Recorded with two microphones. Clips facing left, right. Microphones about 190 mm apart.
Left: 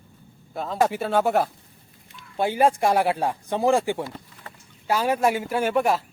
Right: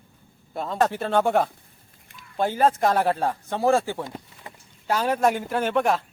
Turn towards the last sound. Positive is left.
turn(degrees=5)  # may be behind; listen again after turning